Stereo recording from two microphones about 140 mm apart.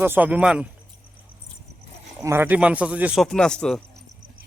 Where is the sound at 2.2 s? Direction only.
15° right (ahead or behind).